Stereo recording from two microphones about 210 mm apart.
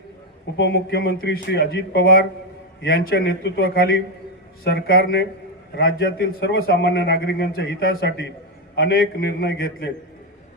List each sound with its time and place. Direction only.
0.5 s a man's voice: 50° left (ahead or behind)